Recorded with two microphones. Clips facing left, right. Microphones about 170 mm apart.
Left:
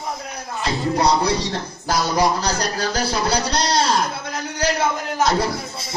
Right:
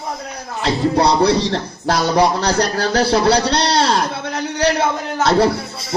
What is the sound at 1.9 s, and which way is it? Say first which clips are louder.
A man's voice: right 4 dB; 65° right (ahead or behind).